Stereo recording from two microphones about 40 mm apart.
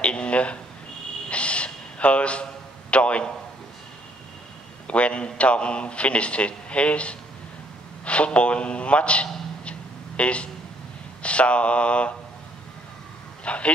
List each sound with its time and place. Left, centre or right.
0.0 s speech: left
1.3 s gasp: left
2.9 s a man's voice: left
4.8 s a man's voice: left
9.7 s a sound: left
11.2 s a man's voice: left
13.4 s speech: left